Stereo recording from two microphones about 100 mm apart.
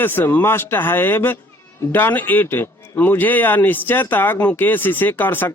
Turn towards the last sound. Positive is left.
turn(degrees=20)  # may be behind; listen again after turning